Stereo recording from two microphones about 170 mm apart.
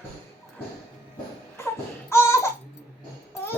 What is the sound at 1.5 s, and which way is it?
Baby cry, 15° left (ahead or behind).